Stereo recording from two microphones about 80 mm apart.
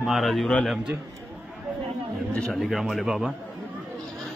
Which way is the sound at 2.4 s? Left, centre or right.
Centre.